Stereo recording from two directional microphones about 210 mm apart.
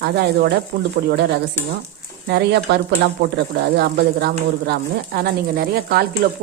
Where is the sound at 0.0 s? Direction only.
50° right (ahead or behind).